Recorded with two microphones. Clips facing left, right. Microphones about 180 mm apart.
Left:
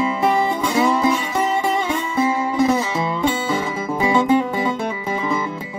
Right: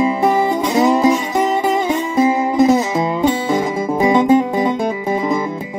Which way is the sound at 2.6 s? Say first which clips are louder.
Right 5 dB; 40° right (ahead or behind).